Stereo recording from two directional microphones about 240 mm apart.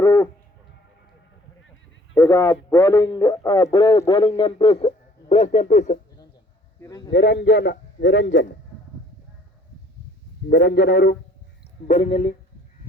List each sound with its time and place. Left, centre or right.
0.0 s a sound: centre
2.1 s speech: centre; by 6.0 s left
6.8 s speech: centre
7.1 s a man's voice: left
10.5 s a man's voice: left